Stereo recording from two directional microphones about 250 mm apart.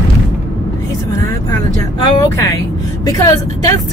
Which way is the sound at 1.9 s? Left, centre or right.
Centre.